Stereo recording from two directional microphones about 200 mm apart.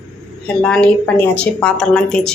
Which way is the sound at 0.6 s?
5° left (ahead or behind).